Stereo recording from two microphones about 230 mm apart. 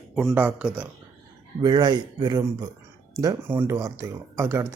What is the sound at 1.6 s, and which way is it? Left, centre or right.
Speech, centre.